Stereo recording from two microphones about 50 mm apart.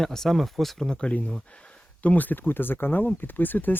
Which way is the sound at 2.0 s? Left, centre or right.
Left.